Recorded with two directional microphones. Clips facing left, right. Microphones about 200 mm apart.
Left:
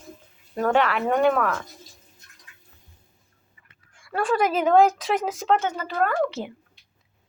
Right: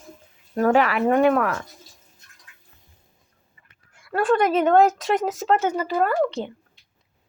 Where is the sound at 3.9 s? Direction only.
5° right (ahead or behind).